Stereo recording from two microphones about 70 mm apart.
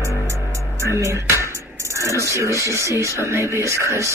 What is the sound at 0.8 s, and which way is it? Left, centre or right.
Music, right.